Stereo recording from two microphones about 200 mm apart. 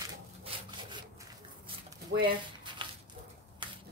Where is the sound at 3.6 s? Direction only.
25° right (ahead or behind).